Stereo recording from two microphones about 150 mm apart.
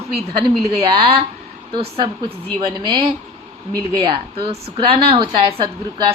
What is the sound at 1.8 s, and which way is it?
A woman's voice, 35° right (ahead or behind).